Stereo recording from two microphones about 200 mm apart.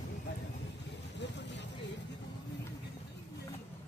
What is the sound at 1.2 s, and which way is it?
Vehicle, 60° left (ahead or behind).